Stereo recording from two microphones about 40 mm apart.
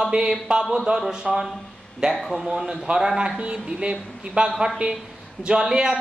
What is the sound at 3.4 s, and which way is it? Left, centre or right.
A woman's voice, right.